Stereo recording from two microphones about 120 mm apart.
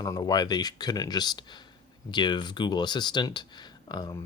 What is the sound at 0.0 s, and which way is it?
Speech, 35° left (ahead or behind).